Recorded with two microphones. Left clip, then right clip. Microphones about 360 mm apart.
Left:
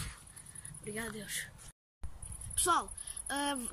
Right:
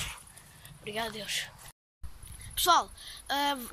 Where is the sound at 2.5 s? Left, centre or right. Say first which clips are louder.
Right 7 dB; centre.